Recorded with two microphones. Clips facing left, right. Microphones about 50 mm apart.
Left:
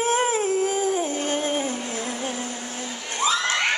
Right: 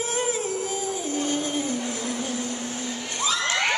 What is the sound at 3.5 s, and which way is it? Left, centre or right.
Children shouting, centre.